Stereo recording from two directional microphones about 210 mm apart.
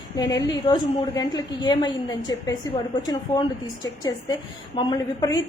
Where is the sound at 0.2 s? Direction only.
15° left (ahead or behind).